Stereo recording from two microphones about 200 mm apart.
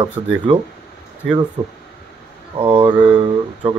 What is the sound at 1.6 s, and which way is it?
Speech, 15° right (ahead or behind).